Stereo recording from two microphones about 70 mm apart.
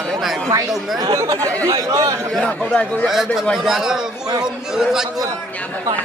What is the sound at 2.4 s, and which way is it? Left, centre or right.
Speech, centre.